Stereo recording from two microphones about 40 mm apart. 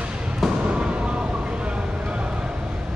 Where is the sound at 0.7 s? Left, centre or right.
Right.